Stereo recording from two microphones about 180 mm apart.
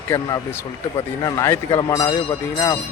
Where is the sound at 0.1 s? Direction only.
15° left (ahead or behind).